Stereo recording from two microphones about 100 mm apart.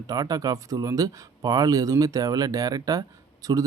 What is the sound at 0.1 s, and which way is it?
Speech, 35° right (ahead or behind).